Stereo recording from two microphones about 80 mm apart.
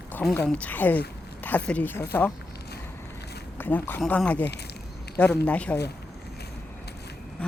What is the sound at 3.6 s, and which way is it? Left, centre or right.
A woman's voice, left.